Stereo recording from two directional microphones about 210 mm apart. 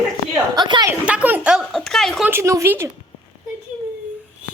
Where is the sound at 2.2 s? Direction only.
10° right (ahead or behind).